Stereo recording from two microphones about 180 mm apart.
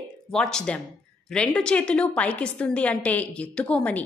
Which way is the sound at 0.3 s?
5° left (ahead or behind).